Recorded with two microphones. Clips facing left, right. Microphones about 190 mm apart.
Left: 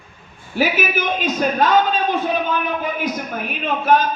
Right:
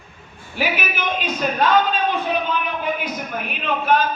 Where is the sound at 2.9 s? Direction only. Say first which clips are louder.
Left 3 dB; 45° left (ahead or behind).